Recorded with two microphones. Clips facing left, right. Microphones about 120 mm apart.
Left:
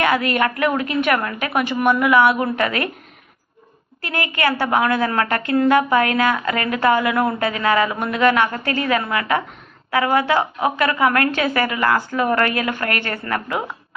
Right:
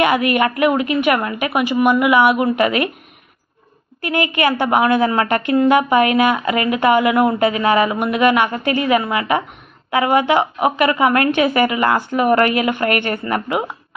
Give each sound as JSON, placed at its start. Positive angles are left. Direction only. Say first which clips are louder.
{"t": 0.0, "sound": "a woman's voice", "louder": "right 3 dB", "side_deg": -15}
{"t": 4.0, "sound": "a woman's voice", "louder": "right 4 dB", "side_deg": -20}